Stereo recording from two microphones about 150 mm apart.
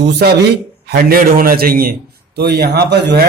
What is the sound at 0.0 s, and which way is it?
A man's voice, 90° right.